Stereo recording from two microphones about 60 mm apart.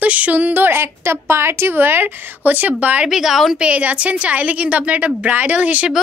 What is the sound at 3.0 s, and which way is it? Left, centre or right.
Speech, centre.